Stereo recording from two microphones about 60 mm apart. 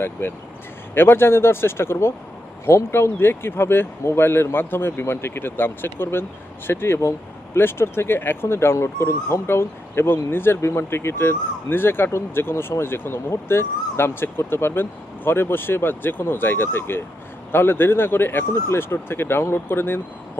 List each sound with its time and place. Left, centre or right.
0.0 s speech: left